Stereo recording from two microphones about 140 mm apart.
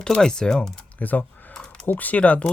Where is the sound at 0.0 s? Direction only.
5° left (ahead or behind).